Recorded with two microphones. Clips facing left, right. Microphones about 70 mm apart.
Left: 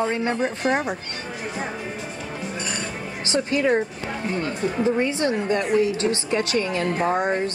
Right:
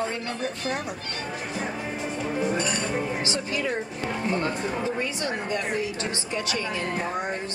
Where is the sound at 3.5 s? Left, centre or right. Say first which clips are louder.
Left 11 dB; left.